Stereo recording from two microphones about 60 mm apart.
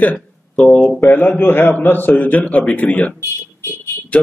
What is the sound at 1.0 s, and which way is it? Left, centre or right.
A man's voice, left.